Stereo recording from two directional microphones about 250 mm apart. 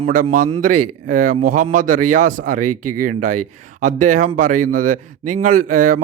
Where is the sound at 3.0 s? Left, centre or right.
Right.